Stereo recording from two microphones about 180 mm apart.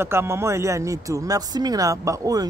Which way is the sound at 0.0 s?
15° right (ahead or behind).